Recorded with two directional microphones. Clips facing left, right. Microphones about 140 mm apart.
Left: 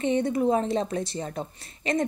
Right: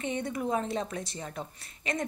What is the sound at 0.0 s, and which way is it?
A woman's voice, 30° left (ahead or behind).